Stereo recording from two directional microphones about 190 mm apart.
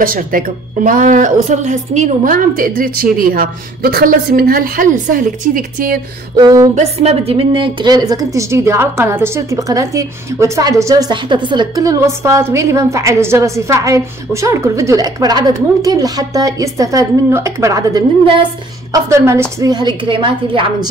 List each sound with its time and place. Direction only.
0.0 s speech: 45° right (ahead or behind)
6.3 s a woman's voice: 20° right (ahead or behind)
6.7 s a woman's voice: 35° right (ahead or behind)